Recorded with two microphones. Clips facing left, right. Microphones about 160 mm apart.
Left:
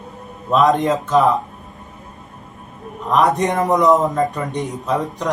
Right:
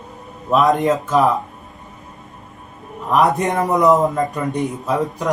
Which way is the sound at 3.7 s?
Centre (ahead or behind).